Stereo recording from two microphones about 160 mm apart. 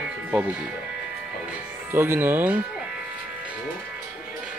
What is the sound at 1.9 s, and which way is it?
Speech, 15° right (ahead or behind).